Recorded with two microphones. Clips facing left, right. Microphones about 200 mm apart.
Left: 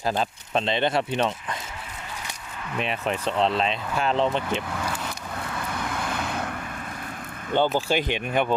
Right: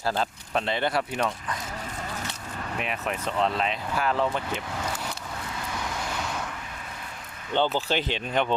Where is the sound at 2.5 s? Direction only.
40° right (ahead or behind).